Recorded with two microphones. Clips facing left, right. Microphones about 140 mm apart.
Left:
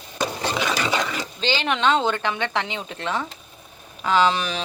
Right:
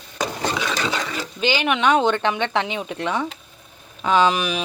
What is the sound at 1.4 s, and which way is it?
Speech, 10° right (ahead or behind).